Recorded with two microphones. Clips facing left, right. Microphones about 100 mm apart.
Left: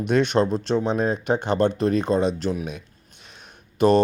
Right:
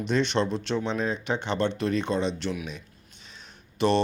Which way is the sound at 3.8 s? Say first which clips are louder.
Left 6 dB; 45° left (ahead or behind).